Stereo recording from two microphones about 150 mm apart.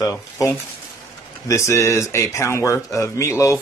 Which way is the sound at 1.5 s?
20° left (ahead or behind).